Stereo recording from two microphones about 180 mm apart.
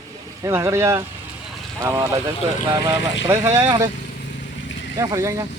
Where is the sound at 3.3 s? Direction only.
15° right (ahead or behind).